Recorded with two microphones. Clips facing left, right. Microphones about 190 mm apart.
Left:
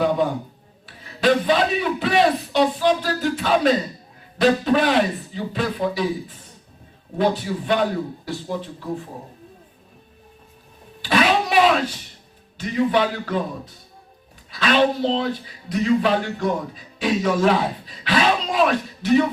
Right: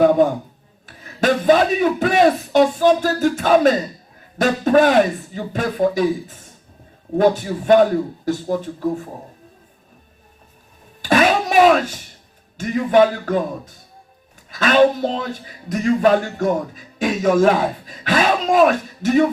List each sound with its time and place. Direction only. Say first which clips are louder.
0.0 s a sound: right 6 dB; 45° right (ahead or behind)
0.9 s a man's voice: even; 45° right (ahead or behind)
11.0 s music: right 3 dB; 45° right (ahead or behind)
12.5 s a man's voice: right 5 dB; 45° right (ahead or behind)